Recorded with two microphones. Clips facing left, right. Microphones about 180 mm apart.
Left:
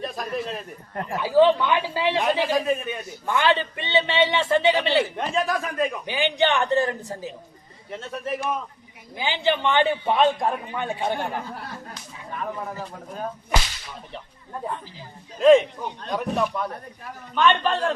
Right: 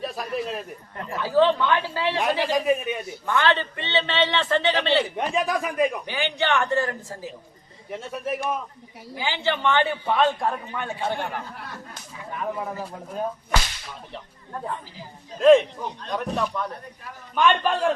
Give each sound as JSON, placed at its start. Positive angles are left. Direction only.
{"t": 0.0, "sound": "a man's voice", "side_deg": -5}
{"t": 1.1, "sound": "a man's voice", "side_deg": 15}
{"t": 2.5, "sound": "a man's voice", "side_deg": -15}
{"t": 3.2, "sound": "a man's voice", "side_deg": 15}
{"t": 5.1, "sound": "a man's voice", "side_deg": -15}
{"t": 6.1, "sound": "a man's voice", "side_deg": 15}
{"t": 7.9, "sound": "a man's voice", "side_deg": -10}
{"t": 9.1, "sound": "a man's voice", "side_deg": 15}
{"t": 12.4, "sound": "a man's voice", "side_deg": -5}
{"t": 15.4, "sound": "a man's voice", "side_deg": 0}
{"t": 17.3, "sound": "a man's voice", "side_deg": -10}